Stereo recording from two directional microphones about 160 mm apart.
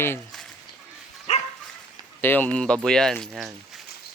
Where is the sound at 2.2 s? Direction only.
10° left (ahead or behind).